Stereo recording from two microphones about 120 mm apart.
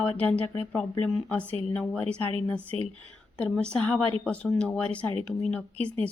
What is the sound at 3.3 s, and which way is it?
A woman's voice, 10° left (ahead or behind).